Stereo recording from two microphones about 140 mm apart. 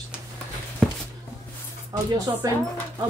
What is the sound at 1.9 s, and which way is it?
Speech, 25° right (ahead or behind).